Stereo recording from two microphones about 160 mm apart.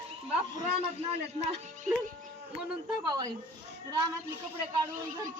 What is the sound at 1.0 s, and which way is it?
Speech, 40° right (ahead or behind).